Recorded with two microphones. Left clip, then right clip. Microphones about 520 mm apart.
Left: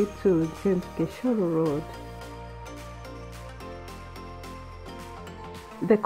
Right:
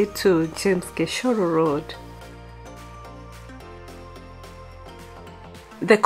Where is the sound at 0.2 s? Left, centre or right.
Right.